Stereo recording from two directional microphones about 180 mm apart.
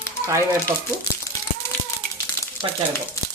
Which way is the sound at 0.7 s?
20° right (ahead or behind).